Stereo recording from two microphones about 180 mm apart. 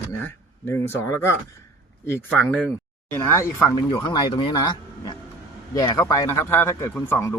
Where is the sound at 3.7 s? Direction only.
25° left (ahead or behind).